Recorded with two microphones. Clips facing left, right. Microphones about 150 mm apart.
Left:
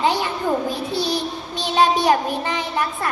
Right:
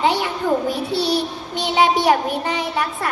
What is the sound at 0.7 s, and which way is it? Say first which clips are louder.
A child's voice: right 3 dB; 75° right (ahead or behind).